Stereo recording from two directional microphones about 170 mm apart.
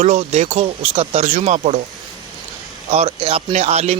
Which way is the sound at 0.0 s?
45° right (ahead or behind).